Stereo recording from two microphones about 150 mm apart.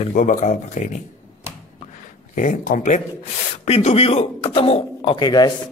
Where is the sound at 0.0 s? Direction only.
60° left (ahead or behind).